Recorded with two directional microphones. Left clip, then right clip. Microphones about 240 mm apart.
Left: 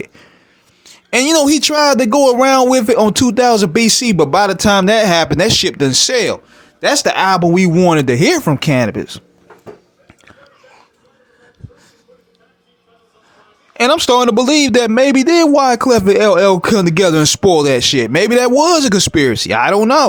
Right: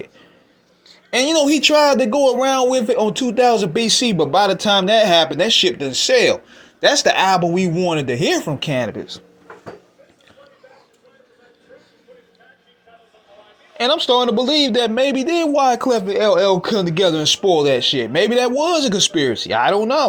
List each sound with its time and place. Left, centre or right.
1.1 s speech: left
6.5 s speech: left
13.7 s speech: left
18.8 s speech: left
19.1 s speech: left